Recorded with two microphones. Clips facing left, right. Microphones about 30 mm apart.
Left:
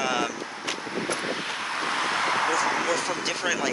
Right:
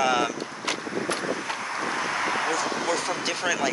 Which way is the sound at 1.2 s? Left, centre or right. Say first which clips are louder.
Even; left.